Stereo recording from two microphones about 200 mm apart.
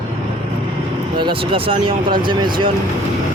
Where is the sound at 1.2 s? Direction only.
25° right (ahead or behind).